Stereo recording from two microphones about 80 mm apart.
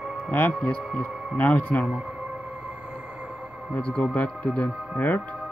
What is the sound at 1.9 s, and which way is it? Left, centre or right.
Music, centre.